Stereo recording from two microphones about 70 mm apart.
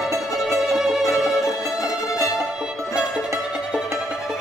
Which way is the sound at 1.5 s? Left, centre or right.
Left.